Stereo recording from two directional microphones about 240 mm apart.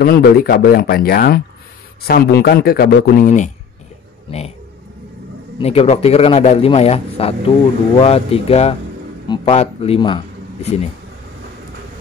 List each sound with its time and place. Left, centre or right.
0.0 s speech: left
5.6 s a man's voice: left